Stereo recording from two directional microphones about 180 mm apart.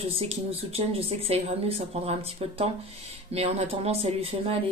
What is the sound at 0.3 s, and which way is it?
A woman's voice, 35° right (ahead or behind).